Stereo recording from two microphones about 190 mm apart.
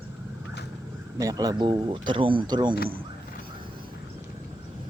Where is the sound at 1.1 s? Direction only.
20° right (ahead or behind).